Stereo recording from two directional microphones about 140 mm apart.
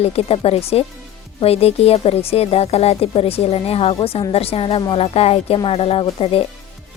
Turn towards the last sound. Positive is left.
turn(degrees=40)  # may be behind; listen again after turning